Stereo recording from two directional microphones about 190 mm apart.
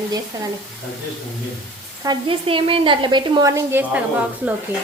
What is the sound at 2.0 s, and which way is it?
A woman's voice, 25° right (ahead or behind).